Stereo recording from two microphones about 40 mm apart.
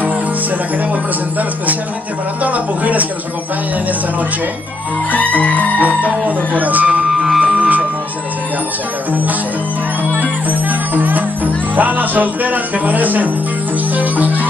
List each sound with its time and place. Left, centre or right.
2.4 s a sound: right
5.1 s music: left
5.8 s music: right
7.2 s music: centre
7.5 s music: right
10.2 s music: right